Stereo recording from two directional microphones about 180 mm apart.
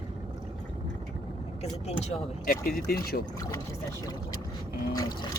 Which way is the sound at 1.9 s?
35° left (ahead or behind).